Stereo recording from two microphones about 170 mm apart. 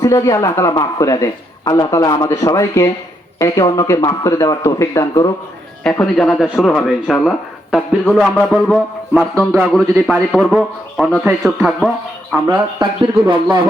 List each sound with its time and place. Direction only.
0.0 s speech: 20° left (ahead or behind)
5.8 s speech: 5° left (ahead or behind)
12.5 s speech: 25° right (ahead or behind)